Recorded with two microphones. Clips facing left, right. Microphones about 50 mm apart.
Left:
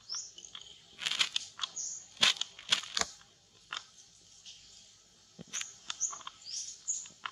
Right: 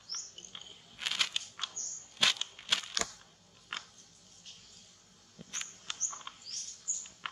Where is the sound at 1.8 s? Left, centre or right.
Left.